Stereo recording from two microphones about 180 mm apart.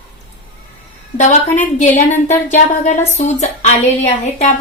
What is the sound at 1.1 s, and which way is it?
A woman's voice, 45° left (ahead or behind).